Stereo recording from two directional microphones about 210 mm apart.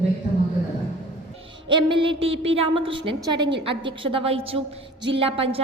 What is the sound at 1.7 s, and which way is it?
Speech, 25° right (ahead or behind).